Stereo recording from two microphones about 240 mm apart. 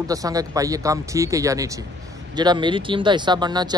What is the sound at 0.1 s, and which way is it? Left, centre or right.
Speech, centre.